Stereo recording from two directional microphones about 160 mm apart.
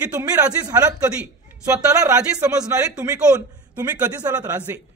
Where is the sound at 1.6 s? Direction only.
20° right (ahead or behind).